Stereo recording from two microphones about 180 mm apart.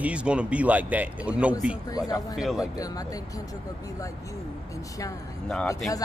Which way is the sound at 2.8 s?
20° left (ahead or behind).